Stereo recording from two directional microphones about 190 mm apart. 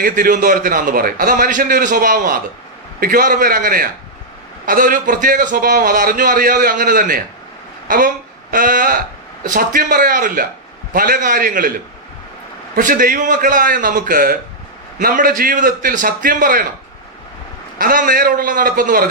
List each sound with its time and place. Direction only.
0.0 s a man's voice: 45° right (ahead or behind)
12.7 s a man's voice: 45° right (ahead or behind)
17.7 s a man's voice: 45° right (ahead or behind)